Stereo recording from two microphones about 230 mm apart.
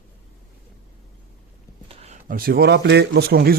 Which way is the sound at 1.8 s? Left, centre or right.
Right.